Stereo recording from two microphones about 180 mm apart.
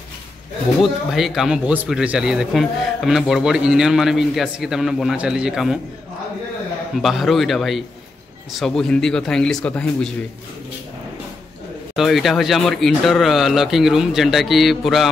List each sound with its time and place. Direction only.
0.7 s speech: centre (ahead or behind)
7.0 s speech: centre (ahead or behind)
11.9 s speech: centre (ahead or behind)